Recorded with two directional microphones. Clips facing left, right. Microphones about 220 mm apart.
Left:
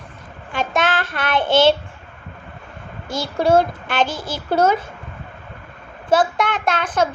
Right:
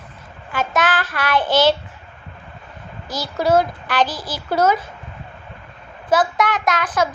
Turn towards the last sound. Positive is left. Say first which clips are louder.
# even
turn(degrees=30)  # may be behind; listen again after turning